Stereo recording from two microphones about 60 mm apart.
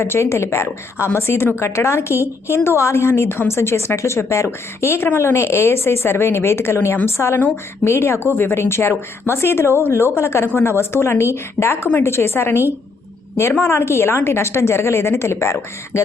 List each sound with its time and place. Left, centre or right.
0.0 s a woman's voice: left